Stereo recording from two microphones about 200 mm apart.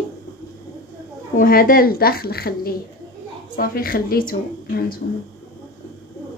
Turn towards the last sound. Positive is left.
turn(degrees=50)  # may be behind; listen again after turning